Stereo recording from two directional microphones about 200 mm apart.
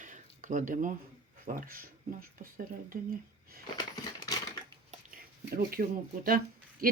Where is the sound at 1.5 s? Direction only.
45° right (ahead or behind).